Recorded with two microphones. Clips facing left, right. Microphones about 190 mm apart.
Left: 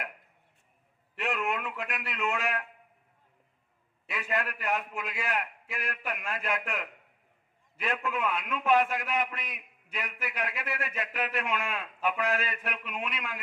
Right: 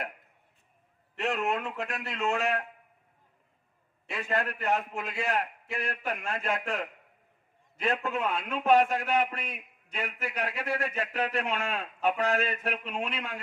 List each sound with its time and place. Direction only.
1.2 s a man's voice: 30° right (ahead or behind)
4.1 s a man's voice: 30° right (ahead or behind)